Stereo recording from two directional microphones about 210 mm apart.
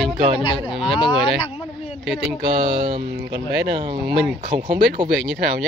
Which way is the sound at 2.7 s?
25° right (ahead or behind).